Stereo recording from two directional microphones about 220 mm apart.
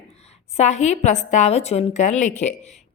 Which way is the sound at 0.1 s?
30° left (ahead or behind).